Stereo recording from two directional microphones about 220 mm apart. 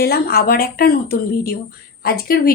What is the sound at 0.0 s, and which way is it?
Speech, 45° left (ahead or behind).